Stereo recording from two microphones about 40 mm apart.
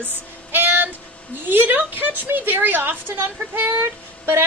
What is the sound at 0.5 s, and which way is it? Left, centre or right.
Music, right.